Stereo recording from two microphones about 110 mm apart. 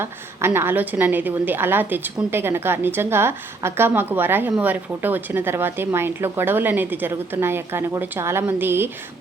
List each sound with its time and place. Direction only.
0.0 s a woman's voice: 20° right (ahead or behind)